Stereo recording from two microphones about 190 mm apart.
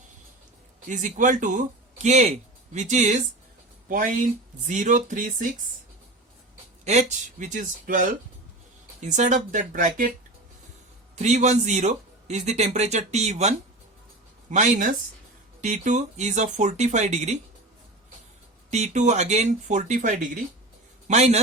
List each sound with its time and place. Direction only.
0.9 s a man's voice: 40° right (ahead or behind)
6.8 s a man's voice: 40° right (ahead or behind)
11.1 s a man's voice: 35° right (ahead or behind)
18.7 s a man's voice: 40° right (ahead or behind)